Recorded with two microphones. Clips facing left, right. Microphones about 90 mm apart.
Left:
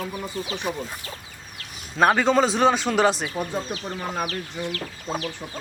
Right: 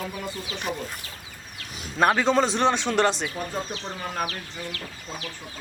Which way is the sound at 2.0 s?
Centre (ahead or behind).